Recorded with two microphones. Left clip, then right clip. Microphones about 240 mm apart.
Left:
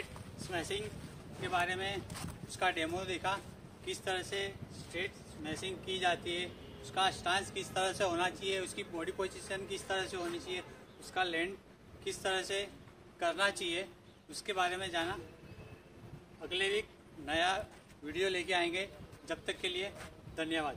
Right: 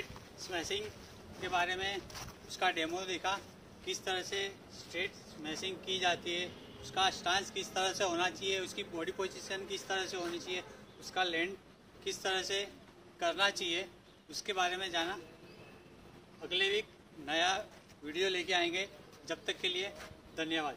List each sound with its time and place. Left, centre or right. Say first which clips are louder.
0.5 s a man's voice: even; centre
16.4 s a man's voice: right 2 dB; centre